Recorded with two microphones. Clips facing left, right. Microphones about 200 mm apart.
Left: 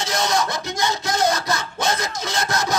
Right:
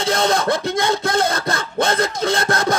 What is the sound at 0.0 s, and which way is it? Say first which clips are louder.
Speech: right 4 dB; 55° right (ahead or behind).